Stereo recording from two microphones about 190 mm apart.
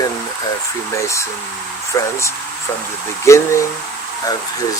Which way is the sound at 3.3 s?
15° left (ahead or behind).